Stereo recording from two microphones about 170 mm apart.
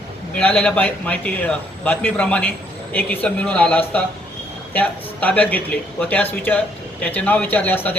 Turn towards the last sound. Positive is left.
turn(degrees=10)  # may be behind; listen again after turning